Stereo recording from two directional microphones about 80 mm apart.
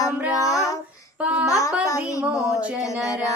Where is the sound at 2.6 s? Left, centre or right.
Centre.